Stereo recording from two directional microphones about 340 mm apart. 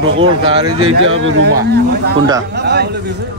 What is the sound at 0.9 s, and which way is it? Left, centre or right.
Speech, right.